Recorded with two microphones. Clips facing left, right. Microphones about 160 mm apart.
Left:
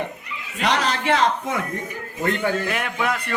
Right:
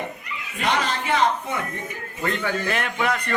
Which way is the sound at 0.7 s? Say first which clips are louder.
Left 2 dB; 80° left.